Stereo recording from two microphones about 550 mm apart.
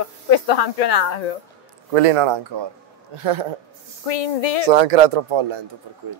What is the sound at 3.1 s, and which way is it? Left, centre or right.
Speech, right.